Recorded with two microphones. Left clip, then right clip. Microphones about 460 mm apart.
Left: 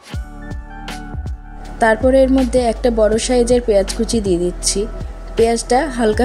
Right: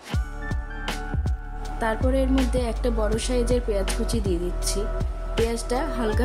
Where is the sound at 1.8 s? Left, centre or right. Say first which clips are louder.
Left 13 dB; right.